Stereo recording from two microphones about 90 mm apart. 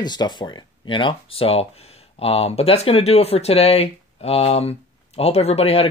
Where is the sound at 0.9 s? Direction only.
80° left.